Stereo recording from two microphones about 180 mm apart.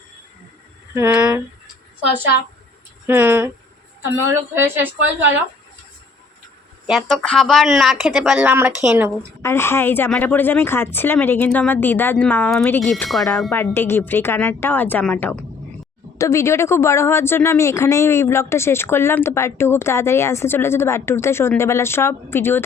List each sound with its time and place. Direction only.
0.9 s speech: 10° right (ahead or behind)
3.1 s a woman's voice: 10° right (ahead or behind)
6.8 s speech: centre (ahead or behind)
9.4 s speech: 15° left (ahead or behind)
13.5 s speech: 15° left (ahead or behind)